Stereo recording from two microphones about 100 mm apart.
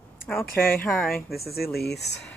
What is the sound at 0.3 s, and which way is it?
Speech, 20° left (ahead or behind).